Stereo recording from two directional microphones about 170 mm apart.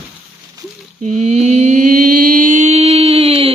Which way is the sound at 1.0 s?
45° right (ahead or behind).